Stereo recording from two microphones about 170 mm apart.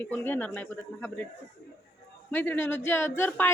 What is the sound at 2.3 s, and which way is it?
Speech, 10° left (ahead or behind).